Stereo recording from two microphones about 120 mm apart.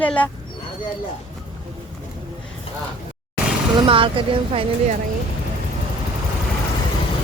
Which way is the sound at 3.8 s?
45° right (ahead or behind).